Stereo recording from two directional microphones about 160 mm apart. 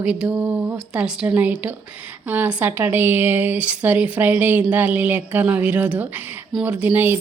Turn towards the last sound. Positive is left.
turn(degrees=-10)  # may be behind; listen again after turning